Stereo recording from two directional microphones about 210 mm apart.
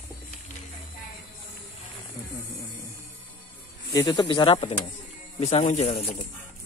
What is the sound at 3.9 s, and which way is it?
Speech, 15° left (ahead or behind).